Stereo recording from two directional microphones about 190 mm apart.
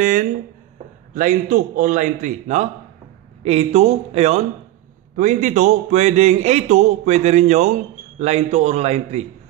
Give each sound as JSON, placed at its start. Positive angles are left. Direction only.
{"t": 0.0, "sound": "a man's voice", "side_deg": -40}